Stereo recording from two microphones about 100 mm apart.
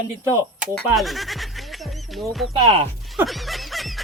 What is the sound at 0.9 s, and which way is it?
Goat, centre (ahead or behind).